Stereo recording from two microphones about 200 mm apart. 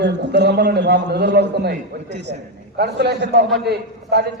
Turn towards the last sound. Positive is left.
turn(degrees=-55)  # may be behind; listen again after turning